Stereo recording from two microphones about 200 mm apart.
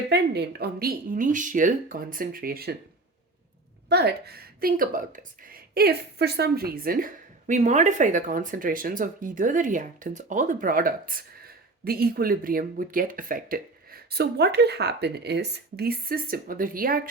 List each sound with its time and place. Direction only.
0.1 s a woman's voice: 55° right (ahead or behind)
3.8 s a woman's voice: 55° right (ahead or behind)